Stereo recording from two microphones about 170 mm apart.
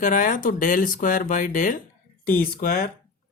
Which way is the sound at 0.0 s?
50° left (ahead or behind).